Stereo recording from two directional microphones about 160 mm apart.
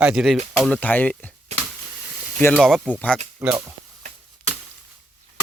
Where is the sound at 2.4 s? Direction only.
5° left (ahead or behind).